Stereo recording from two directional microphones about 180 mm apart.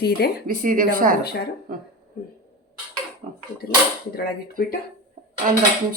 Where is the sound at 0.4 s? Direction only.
50° right (ahead or behind).